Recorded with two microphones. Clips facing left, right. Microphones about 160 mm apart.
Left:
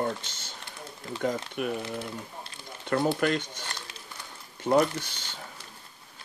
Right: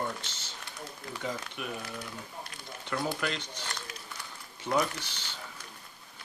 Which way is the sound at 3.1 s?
50° left (ahead or behind).